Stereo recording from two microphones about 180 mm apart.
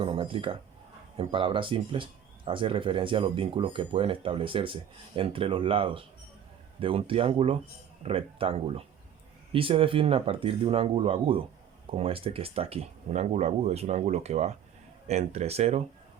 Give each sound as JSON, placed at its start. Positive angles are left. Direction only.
{"t": 0.0, "sound": "speech", "side_deg": -30}